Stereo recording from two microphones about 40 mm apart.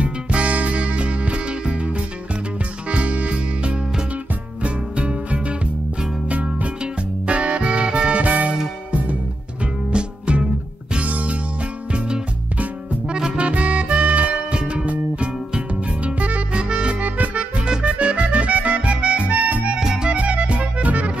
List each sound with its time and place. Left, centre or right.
0.0 s music: right
11.1 s music: right
17.0 s music: right
19.8 s music: centre
20.1 s music: right